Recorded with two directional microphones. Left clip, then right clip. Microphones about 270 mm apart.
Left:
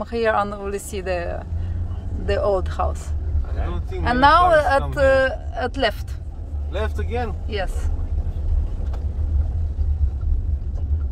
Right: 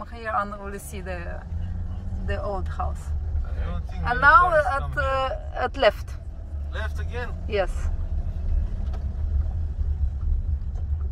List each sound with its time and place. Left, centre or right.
0.0 s a woman's voice: centre
4.0 s a woman's voice: centre
7.4 s speech: centre